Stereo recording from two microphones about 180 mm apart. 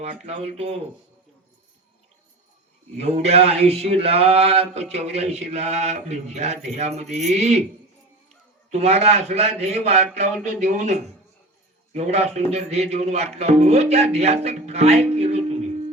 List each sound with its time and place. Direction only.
0.0 s speech: 35° right (ahead or behind)
3.0 s speech: 35° right (ahead or behind)
8.7 s speech: 35° right (ahead or behind)